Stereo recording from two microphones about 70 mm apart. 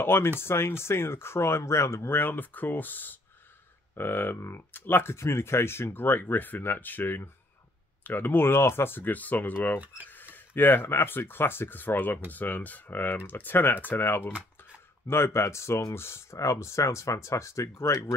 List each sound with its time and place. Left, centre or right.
0.0 s speech: left